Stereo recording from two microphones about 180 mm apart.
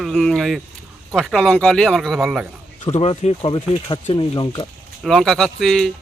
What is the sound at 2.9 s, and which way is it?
Speech, 35° left (ahead or behind).